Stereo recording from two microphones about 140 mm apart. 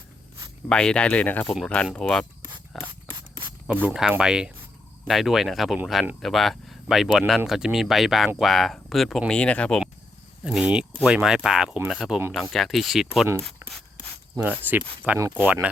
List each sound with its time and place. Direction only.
0.7 s speech: 5° left (ahead or behind)
2.7 s ratchet: centre (ahead or behind)
3.8 s speech: 5° right (ahead or behind)
10.4 s speech: 10° right (ahead or behind)
13.6 s a sound: 20° right (ahead or behind)
14.6 s speech: 10° right (ahead or behind)